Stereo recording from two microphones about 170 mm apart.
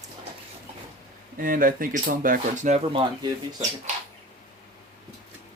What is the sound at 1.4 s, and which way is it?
Speech, 55° right (ahead or behind).